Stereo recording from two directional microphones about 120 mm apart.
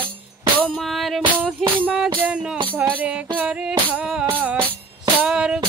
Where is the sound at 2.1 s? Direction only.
10° right (ahead or behind).